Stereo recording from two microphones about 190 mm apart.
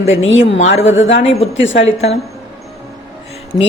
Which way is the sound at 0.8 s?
80° left.